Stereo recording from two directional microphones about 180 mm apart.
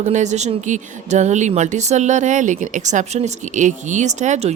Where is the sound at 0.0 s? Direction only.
40° right (ahead or behind).